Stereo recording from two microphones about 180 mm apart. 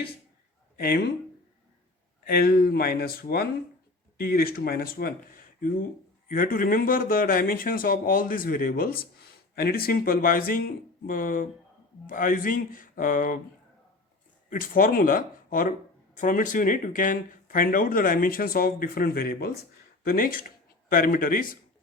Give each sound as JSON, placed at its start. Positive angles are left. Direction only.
{"t": 0.8, "sound": "speech", "side_deg": 55}
{"t": 2.2, "sound": "speech", "side_deg": 55}
{"t": 14.5, "sound": "speech", "side_deg": 50}